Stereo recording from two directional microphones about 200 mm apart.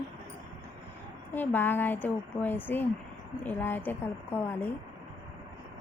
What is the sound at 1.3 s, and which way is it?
A woman's voice, 10° left (ahead or behind).